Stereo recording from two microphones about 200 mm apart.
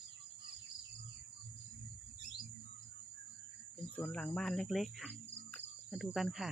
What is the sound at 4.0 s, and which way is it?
Speech, 5° left (ahead or behind).